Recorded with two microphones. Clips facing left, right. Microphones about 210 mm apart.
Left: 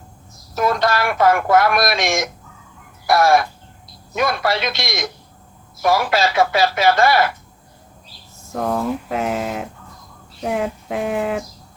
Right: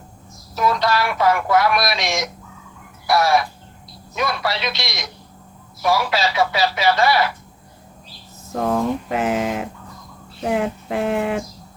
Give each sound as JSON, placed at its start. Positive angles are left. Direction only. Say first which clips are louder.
{"t": 0.5, "sound": "speech", "louder": "left 1 dB", "side_deg": 50}
{"t": 8.5, "sound": "speech", "louder": "right 1 dB", "side_deg": 0}